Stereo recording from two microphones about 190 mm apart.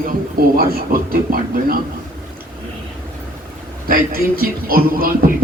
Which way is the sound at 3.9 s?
50° right (ahead or behind).